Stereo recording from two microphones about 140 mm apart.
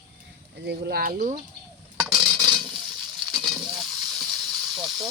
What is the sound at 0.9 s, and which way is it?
Speech, 90° right.